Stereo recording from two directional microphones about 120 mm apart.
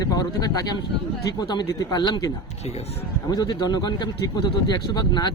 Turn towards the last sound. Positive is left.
turn(degrees=35)  # may be behind; listen again after turning